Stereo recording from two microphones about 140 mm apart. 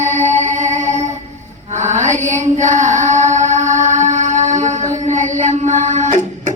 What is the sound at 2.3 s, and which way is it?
Child singing, 60° right (ahead or behind).